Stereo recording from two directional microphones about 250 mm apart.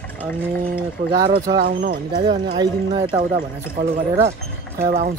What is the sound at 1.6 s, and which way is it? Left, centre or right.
Speech, right.